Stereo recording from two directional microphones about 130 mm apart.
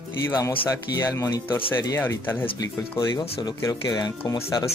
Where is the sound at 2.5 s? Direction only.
30° left (ahead or behind).